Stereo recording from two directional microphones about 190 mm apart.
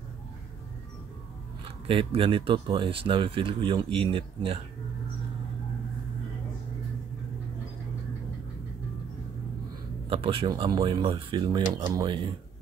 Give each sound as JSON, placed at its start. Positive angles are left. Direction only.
{"t": 1.9, "sound": "speech", "side_deg": -30}
{"t": 10.0, "sound": "speech", "side_deg": -30}